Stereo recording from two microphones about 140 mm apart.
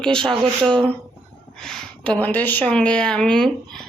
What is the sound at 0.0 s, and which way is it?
Speech, 5° left (ahead or behind).